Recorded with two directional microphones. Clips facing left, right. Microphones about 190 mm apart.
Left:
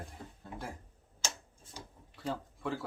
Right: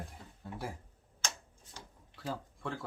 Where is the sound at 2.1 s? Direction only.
Centre (ahead or behind).